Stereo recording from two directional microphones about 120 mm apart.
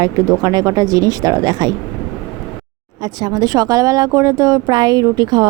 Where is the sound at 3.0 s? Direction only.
35° right (ahead or behind).